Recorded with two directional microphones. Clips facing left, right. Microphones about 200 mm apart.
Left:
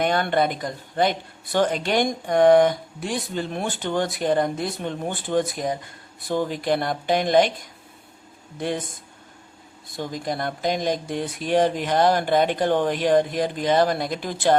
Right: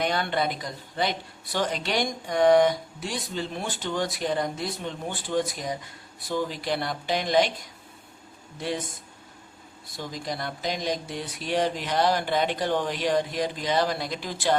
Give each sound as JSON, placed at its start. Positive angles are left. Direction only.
{"t": 0.0, "sound": "speech", "side_deg": 50}
{"t": 10.1, "sound": "speech", "side_deg": 50}